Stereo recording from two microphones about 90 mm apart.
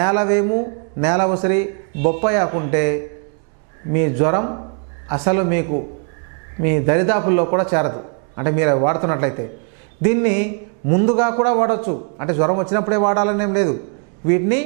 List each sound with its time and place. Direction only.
0.0 s a man's voice: 15° right (ahead or behind)